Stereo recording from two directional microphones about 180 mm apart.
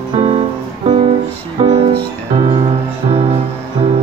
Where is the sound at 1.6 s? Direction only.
35° right (ahead or behind).